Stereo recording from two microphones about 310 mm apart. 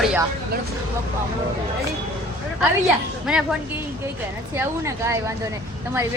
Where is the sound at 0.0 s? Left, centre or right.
Centre.